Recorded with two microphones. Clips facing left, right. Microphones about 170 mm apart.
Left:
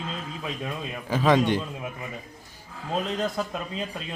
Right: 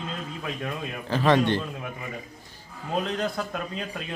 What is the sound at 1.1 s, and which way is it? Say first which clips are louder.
Speech: even; 10° left (ahead or behind).